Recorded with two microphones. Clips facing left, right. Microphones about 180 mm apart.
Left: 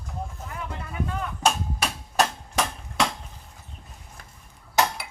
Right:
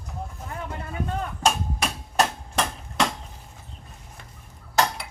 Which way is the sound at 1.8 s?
Centre (ahead or behind).